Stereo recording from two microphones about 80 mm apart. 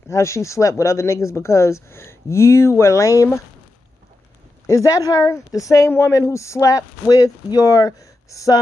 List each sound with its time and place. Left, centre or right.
0.1 s speech: left
4.6 s speech: left